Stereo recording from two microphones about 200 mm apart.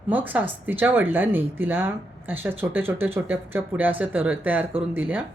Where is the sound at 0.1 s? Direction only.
10° right (ahead or behind).